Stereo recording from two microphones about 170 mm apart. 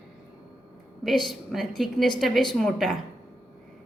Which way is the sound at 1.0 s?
Centre (ahead or behind).